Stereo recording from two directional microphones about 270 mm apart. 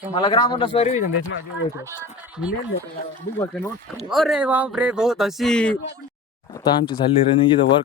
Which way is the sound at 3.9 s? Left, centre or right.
Centre.